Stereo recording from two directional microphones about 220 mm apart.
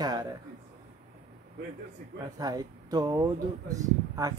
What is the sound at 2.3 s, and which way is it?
Speech, 15° right (ahead or behind).